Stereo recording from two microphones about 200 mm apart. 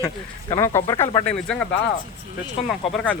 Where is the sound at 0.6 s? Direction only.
15° left (ahead or behind).